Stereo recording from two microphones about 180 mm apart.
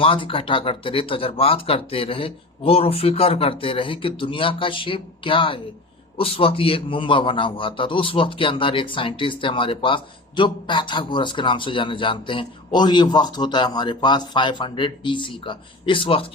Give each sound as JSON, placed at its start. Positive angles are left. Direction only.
{"t": 0.0, "sound": "a man's voice", "side_deg": 30}